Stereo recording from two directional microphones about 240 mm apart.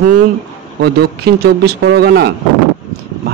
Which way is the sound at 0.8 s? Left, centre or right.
Right.